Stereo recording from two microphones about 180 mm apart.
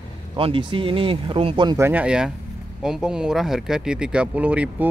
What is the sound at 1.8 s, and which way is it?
Speech, 10° right (ahead or behind).